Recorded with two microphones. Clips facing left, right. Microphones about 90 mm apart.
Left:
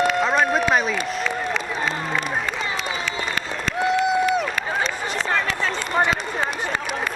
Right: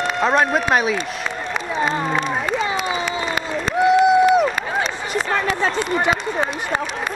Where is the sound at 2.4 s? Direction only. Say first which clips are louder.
Right 5 dB; 15° right (ahead or behind).